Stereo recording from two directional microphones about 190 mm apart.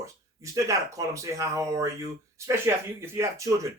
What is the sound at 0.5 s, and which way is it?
Speech, 15° right (ahead or behind).